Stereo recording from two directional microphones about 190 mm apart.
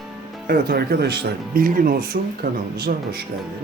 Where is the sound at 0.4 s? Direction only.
50° right (ahead or behind).